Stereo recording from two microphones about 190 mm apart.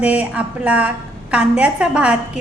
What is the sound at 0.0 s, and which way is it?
A woman's voice, 5° right (ahead or behind).